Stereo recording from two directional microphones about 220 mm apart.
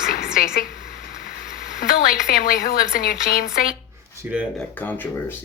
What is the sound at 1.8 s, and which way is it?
A woman's voice, 40° left (ahead or behind).